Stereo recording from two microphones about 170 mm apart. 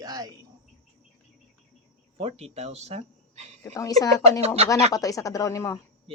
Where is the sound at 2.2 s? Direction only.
35° right (ahead or behind).